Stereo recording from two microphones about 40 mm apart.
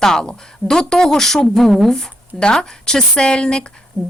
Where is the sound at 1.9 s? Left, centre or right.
Centre.